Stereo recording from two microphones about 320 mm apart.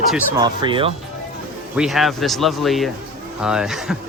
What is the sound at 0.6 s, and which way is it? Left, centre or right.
Speech, centre.